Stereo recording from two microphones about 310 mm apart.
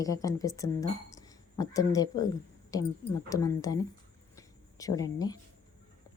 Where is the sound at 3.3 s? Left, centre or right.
Centre.